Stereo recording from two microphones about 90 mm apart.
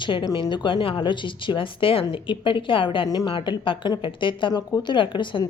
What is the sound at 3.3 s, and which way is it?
A woman's voice, 65° left (ahead or behind).